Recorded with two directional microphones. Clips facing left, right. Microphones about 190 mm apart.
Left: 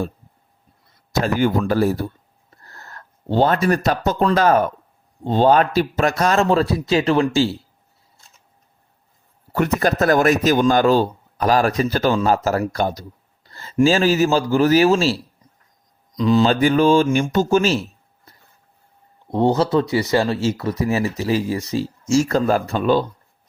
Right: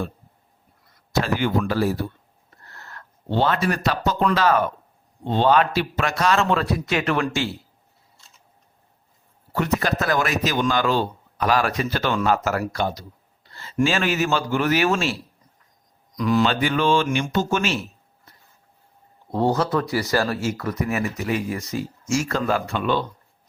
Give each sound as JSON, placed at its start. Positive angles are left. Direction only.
{"t": 1.2, "sound": "speech", "side_deg": 45}
{"t": 2.5, "sound": "a sound", "side_deg": 40}
{"t": 4.4, "sound": "a man's voice", "side_deg": 45}
{"t": 9.5, "sound": "a man's voice", "side_deg": 50}
{"t": 16.5, "sound": "a man's voice", "side_deg": 40}
{"t": 19.3, "sound": "speech", "side_deg": 20}